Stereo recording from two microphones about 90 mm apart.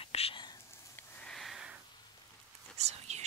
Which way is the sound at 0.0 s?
80° left.